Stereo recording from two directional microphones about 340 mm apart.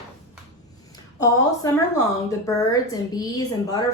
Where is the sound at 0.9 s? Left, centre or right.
Centre.